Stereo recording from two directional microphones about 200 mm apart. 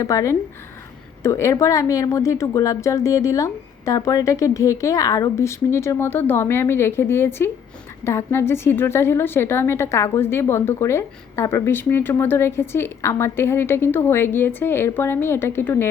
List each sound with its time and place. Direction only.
0.0 s a woman's voice: 15° left (ahead or behind)